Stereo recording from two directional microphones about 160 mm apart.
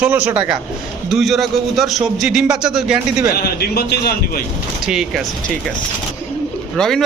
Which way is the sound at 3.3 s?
80° left.